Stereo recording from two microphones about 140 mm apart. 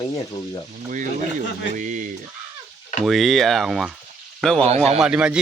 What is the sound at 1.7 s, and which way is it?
Speech, 65° right (ahead or behind).